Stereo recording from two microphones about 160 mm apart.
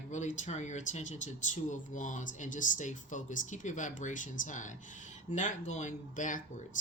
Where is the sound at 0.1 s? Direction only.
45° left (ahead or behind).